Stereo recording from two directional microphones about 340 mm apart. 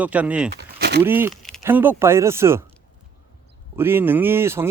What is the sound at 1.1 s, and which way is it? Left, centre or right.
Speech, centre.